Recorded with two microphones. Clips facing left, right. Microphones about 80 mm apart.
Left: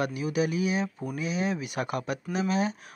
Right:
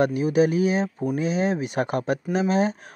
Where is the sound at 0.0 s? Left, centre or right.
Right.